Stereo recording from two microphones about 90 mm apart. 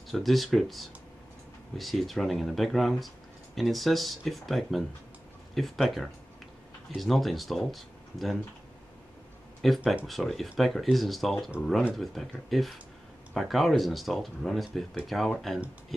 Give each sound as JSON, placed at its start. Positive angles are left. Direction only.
{"t": 0.1, "sound": "speech", "side_deg": 0}
{"t": 9.6, "sound": "speech", "side_deg": 0}